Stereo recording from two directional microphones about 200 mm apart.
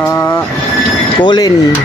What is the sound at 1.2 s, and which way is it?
Speech, 20° left (ahead or behind).